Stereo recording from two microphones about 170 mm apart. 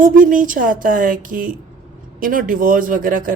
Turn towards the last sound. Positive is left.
turn(degrees=-55)  # may be behind; listen again after turning